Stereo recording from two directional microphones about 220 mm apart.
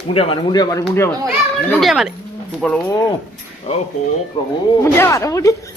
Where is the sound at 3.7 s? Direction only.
30° left (ahead or behind).